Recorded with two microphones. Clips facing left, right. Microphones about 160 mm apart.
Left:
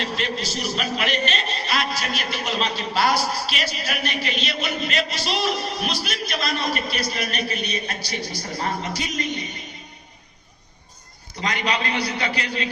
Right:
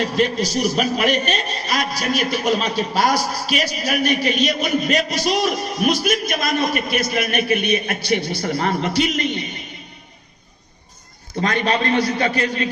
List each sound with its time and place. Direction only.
0.0 s a man's voice: 45° right (ahead or behind); by 8.9 s 70° right (ahead or behind)
11.3 s a man's voice: 50° right (ahead or behind)